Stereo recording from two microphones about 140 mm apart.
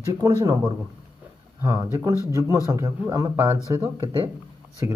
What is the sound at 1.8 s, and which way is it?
Speech, 25° right (ahead or behind).